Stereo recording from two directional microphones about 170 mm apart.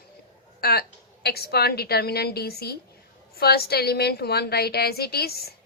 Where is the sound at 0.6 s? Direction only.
65° left (ahead or behind).